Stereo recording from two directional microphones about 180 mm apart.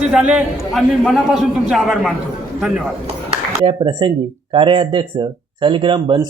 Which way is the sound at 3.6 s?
25° right (ahead or behind).